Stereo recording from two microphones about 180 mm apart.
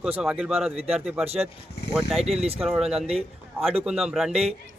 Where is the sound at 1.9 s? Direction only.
5° right (ahead or behind).